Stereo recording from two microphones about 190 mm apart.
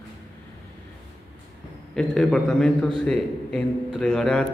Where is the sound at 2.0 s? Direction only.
5° left (ahead or behind).